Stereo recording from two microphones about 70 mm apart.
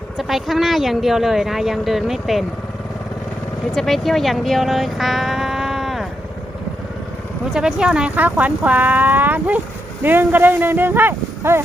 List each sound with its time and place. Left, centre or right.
0.2 s speech: centre
3.7 s speech: centre
7.5 s speech: centre; by 11.6 s right